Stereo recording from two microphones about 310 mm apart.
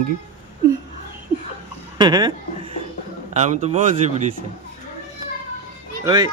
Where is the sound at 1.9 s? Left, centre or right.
Centre.